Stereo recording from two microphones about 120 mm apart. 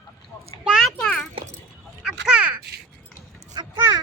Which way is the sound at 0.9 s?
10° left (ahead or behind).